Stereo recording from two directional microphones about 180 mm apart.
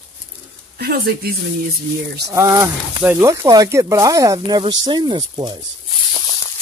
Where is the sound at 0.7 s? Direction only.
60° right (ahead or behind).